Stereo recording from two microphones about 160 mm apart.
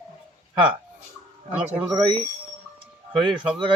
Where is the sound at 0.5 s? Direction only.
30° right (ahead or behind).